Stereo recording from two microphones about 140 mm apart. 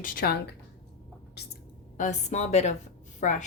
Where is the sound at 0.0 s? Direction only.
80° left.